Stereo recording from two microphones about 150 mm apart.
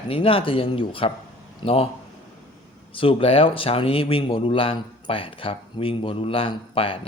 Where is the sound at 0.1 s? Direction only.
40° left (ahead or behind).